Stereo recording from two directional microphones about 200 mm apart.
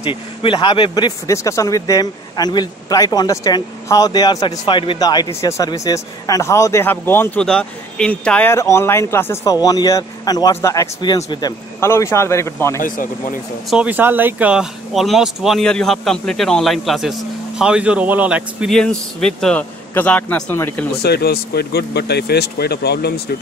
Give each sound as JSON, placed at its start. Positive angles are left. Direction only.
{"t": 0.0, "sound": "speech", "side_deg": 25}
{"t": 12.8, "sound": "speech", "side_deg": 45}
{"t": 13.7, "sound": "speech", "side_deg": -5}
{"t": 21.0, "sound": "speech", "side_deg": 55}